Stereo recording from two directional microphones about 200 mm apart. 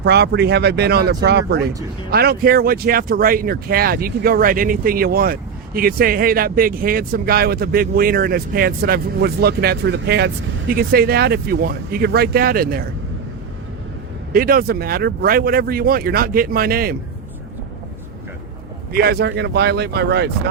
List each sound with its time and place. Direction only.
0.0 s speech: 55° right (ahead or behind)
14.3 s speech: 45° right (ahead or behind)
18.9 s speech: 50° right (ahead or behind)